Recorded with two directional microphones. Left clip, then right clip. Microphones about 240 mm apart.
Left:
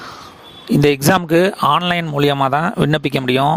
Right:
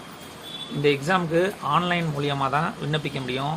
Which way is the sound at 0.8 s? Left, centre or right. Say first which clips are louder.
Left 7 dB; left.